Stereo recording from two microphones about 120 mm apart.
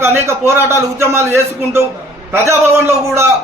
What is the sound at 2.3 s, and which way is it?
Speech, 20° right (ahead or behind).